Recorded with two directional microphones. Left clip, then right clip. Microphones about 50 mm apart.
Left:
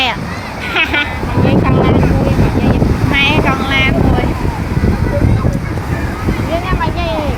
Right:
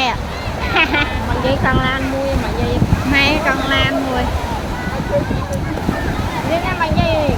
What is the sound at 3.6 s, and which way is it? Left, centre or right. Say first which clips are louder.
Speech: left 3 dB; centre.